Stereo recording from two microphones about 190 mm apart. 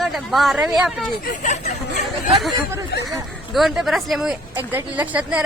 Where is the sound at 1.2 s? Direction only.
40° left (ahead or behind).